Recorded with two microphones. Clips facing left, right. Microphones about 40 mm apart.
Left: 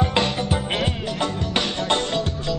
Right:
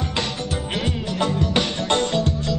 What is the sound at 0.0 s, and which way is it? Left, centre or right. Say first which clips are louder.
Music: left 5 dB; centre.